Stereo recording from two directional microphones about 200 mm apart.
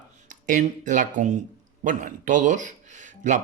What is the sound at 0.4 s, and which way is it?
Speech, 40° right (ahead or behind).